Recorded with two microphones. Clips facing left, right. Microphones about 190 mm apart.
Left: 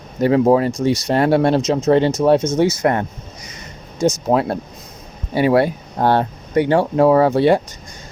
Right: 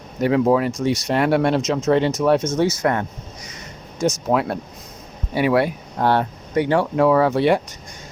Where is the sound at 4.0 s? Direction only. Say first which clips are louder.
Left 3 dB; 35° left (ahead or behind).